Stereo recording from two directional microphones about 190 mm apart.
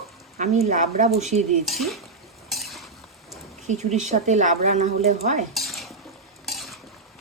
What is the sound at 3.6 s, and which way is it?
Speech, 40° right (ahead or behind).